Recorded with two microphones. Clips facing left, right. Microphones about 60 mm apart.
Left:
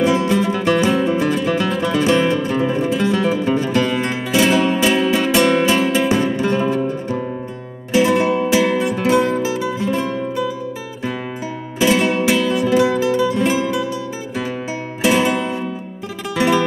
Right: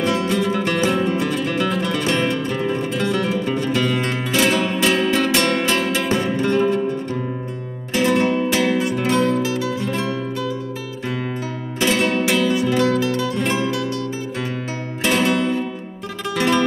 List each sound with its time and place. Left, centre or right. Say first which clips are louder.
0.0 s music: left 4 dB; centre
11.8 s music: left 3 dB; centre
15.0 s music: left 2 dB; centre